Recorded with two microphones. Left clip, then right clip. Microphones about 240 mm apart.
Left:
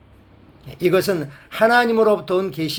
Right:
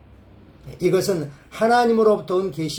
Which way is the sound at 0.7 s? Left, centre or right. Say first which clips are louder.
Left 2 dB; left.